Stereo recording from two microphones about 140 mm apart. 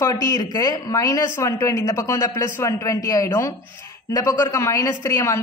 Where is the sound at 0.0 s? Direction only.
25° left (ahead or behind).